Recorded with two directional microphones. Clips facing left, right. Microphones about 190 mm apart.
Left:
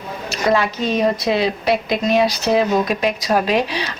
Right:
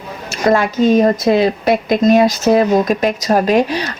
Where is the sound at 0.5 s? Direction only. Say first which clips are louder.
Right 8 dB; 50° right (ahead or behind).